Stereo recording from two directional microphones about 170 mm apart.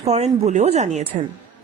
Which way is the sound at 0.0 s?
40° right (ahead or behind).